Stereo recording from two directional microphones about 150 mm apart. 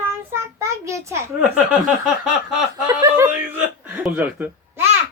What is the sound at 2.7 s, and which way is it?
Speech, 25° right (ahead or behind).